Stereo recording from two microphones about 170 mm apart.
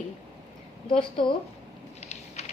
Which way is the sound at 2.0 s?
40° left (ahead or behind).